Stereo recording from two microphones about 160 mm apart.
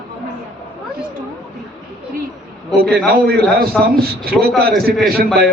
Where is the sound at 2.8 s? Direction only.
80° right.